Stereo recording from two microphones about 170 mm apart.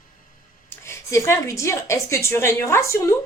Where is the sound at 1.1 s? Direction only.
15° left (ahead or behind).